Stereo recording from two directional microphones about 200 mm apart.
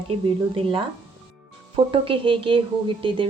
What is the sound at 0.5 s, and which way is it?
Speech, 25° right (ahead or behind).